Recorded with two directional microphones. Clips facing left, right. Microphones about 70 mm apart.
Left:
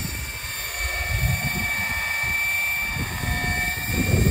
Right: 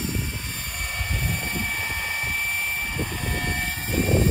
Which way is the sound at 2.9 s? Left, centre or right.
Left.